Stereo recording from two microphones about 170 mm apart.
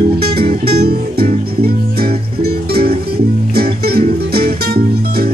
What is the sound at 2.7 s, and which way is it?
Music, 65° right (ahead or behind).